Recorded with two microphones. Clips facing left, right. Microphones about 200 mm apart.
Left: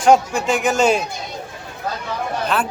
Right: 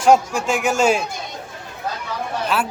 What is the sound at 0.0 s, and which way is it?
Speech, 5° right (ahead or behind).